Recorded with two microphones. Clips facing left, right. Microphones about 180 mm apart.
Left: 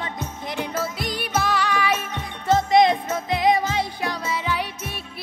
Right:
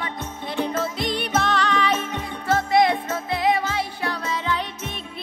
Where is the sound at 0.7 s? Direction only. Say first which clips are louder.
Right 2 dB; 5° left (ahead or behind).